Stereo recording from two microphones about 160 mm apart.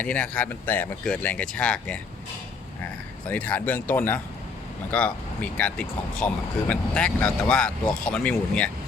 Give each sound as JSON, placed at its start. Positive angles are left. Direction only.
{"t": 0.0, "sound": "speech", "side_deg": 10}
{"t": 3.2, "sound": "speech", "side_deg": 10}